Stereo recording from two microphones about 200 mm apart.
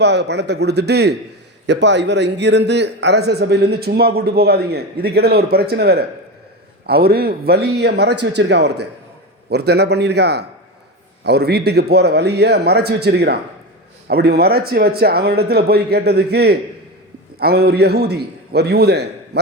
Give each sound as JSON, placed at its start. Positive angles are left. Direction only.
{"t": 0.0, "sound": "a man's voice", "side_deg": -60}